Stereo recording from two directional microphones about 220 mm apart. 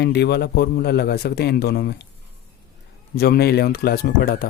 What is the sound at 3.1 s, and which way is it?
Speech, 45° left (ahead or behind).